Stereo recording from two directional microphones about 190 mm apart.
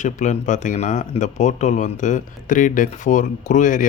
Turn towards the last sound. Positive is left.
turn(degrees=40)  # may be behind; listen again after turning